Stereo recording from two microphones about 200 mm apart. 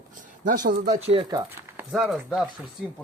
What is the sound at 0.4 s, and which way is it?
Speech, 40° right (ahead or behind).